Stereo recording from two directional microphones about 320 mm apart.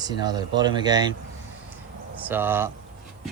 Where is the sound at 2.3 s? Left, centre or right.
Centre.